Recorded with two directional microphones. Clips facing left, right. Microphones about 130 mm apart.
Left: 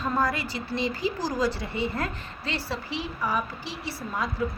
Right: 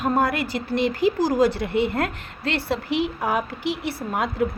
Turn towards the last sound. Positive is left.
turn(degrees=-65)  # may be behind; listen again after turning